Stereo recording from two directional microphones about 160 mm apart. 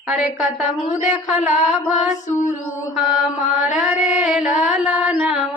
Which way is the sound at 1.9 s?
50° left (ahead or behind).